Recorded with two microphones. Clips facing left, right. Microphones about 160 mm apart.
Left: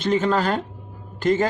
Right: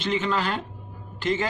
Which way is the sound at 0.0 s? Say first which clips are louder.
Left 5 dB; 45° left (ahead or behind).